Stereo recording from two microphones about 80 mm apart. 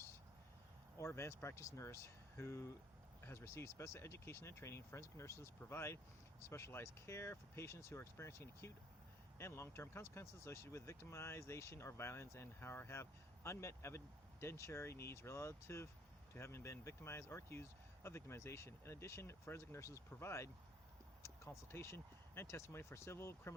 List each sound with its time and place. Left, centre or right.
0.9 s speech: left
21.2 s a sound: left
21.7 s speech: left